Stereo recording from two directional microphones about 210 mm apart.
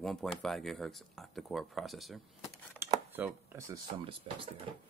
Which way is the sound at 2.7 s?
10° right (ahead or behind).